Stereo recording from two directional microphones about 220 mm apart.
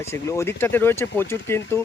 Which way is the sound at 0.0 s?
10° left (ahead or behind).